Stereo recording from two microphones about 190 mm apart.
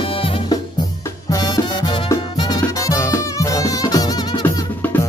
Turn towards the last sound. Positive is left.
turn(degrees=15)  # may be behind; listen again after turning